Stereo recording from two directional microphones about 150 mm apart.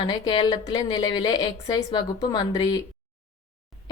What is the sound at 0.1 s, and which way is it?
A woman's voice, 30° left (ahead or behind).